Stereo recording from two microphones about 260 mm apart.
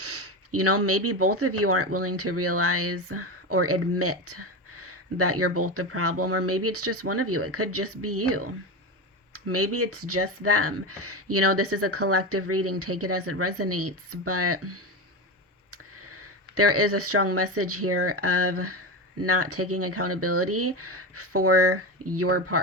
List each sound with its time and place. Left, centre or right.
0.0 s speech: right